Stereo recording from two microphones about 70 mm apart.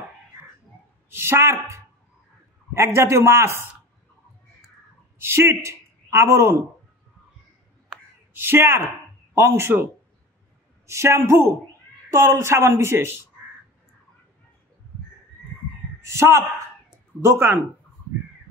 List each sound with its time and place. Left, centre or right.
1.1 s speech: right
5.2 s speech: right
8.4 s speech: right
10.9 s a man's voice: right
16.0 s speech: right